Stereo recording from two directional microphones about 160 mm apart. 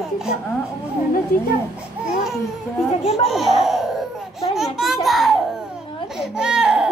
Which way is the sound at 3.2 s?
Centre (ahead or behind).